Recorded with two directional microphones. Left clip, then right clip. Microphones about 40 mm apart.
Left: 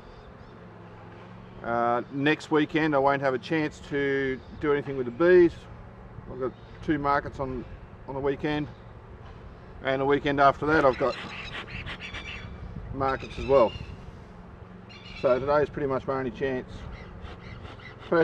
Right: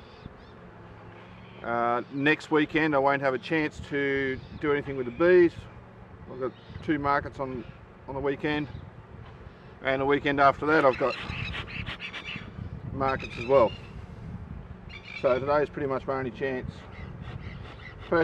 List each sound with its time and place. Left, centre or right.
1.6 s speech: centre
9.8 s speech: right
10.9 s pant: right
12.9 s speech: right
15.4 s speech: centre
18.1 s speech: centre